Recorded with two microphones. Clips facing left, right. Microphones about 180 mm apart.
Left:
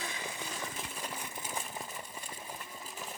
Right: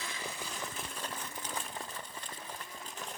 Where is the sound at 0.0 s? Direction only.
15° left (ahead or behind).